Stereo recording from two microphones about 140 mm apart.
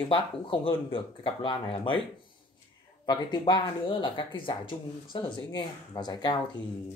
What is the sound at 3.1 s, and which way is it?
Speech, 30° left (ahead or behind).